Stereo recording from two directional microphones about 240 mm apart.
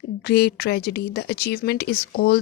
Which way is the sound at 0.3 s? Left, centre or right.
Left.